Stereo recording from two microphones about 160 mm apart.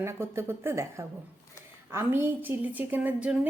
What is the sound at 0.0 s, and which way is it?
A woman's voice, 15° right (ahead or behind).